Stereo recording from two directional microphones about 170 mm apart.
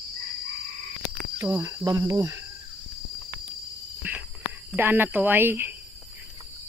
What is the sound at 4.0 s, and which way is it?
Cricket, 10° right (ahead or behind).